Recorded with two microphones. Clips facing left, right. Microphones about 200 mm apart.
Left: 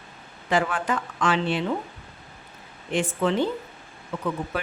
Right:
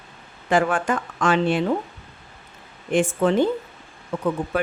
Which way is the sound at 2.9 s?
50° right (ahead or behind).